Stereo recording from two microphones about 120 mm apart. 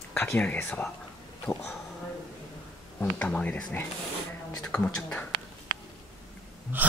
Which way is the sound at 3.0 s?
10° left (ahead or behind).